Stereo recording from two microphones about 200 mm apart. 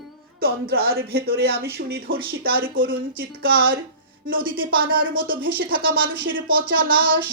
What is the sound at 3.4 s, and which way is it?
Speech, 50° right (ahead or behind).